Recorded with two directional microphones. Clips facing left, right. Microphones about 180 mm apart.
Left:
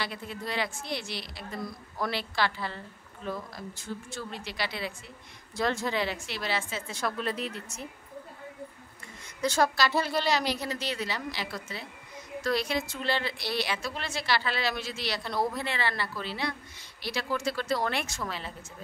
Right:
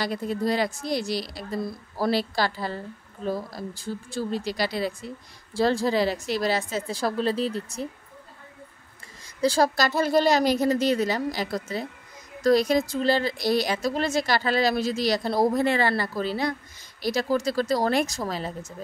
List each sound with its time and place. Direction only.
0.0 s speech: 40° right (ahead or behind)
9.4 s a woman's voice: 35° right (ahead or behind)